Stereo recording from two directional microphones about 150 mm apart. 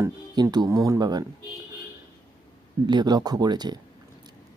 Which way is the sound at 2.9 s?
30° right (ahead or behind).